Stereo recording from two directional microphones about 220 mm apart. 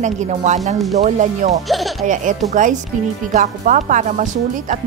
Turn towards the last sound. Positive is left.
turn(degrees=-35)  # may be behind; listen again after turning